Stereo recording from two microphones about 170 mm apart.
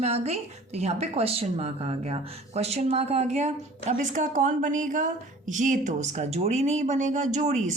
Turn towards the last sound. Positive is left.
turn(degrees=-45)  # may be behind; listen again after turning